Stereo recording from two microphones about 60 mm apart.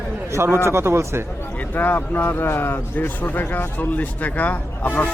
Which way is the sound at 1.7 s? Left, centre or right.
Left.